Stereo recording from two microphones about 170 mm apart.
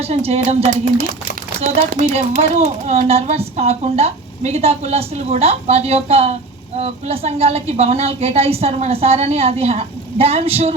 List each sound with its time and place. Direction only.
0.0 s speech: 40° right (ahead or behind)